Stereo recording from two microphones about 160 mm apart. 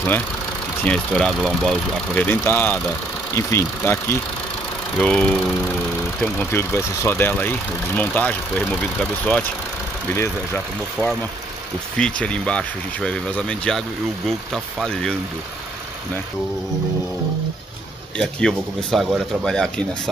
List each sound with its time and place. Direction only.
0.8 s speech: 5° left (ahead or behind)
10.1 s speech: 15° left (ahead or behind)
18.1 s speech: 5° left (ahead or behind)